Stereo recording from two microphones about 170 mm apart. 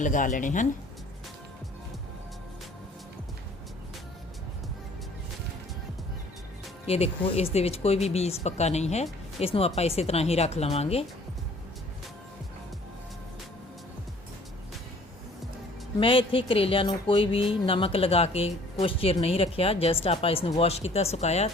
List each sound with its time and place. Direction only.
0.0 s speech: 50° left (ahead or behind)
6.8 s speech: 35° left (ahead or behind)
16.0 s speech: 30° left (ahead or behind)